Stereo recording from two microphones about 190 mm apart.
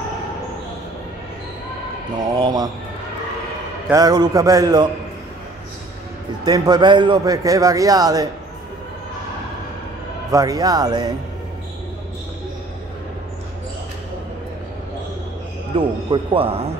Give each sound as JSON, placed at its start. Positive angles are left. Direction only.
{"t": 2.1, "sound": "a man's voice", "side_deg": -20}
{"t": 3.9, "sound": "a man's voice", "side_deg": -20}
{"t": 6.4, "sound": "a man's voice", "side_deg": -20}
{"t": 10.3, "sound": "a man's voice", "side_deg": -20}
{"t": 15.7, "sound": "a man's voice", "side_deg": -25}